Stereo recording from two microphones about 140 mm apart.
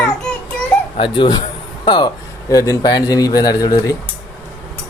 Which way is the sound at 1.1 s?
35° left (ahead or behind).